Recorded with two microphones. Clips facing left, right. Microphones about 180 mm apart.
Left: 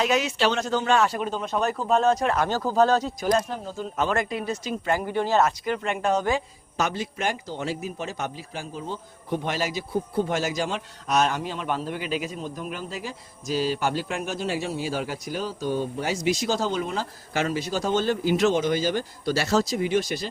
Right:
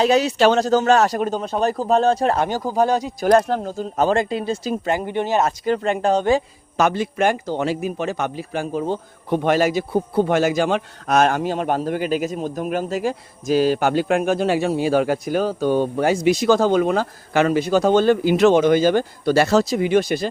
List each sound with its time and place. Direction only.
0.0 s speech: 35° right (ahead or behind)
2.5 s speech: 15° right (ahead or behind)
3.2 s a man's voice: 65° right (ahead or behind)
3.7 s speech: 40° right (ahead or behind); by 5.5 s 20° right (ahead or behind)
5.5 s speech: 35° right (ahead or behind)
6.7 s a man's voice: 55° right (ahead or behind)